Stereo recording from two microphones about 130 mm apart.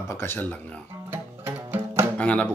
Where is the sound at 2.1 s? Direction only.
10° left (ahead or behind).